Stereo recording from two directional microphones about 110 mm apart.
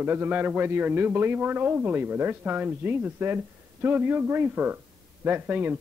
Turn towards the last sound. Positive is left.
turn(degrees=-15)  # may be behind; listen again after turning